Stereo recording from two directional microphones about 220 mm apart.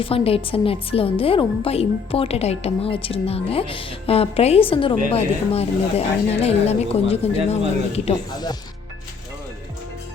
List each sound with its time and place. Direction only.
0.0 s speech: 25° left (ahead or behind)